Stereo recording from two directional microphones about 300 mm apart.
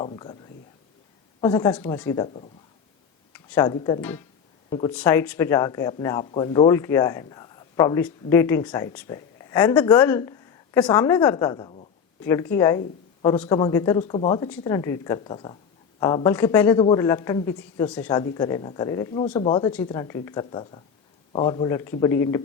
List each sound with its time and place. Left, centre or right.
0.0 s speech: centre
1.4 s speech: centre